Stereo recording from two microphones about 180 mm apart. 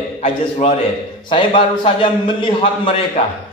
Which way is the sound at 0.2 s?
35° left (ahead or behind).